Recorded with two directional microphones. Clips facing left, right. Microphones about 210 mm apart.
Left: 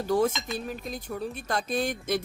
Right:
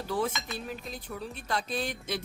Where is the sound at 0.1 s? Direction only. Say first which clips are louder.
Left 7 dB; 45° left (ahead or behind).